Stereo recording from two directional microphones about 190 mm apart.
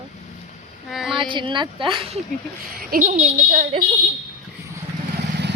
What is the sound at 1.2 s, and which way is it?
Speech, 25° right (ahead or behind).